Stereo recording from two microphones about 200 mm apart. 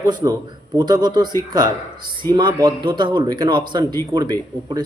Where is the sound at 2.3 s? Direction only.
20° right (ahead or behind).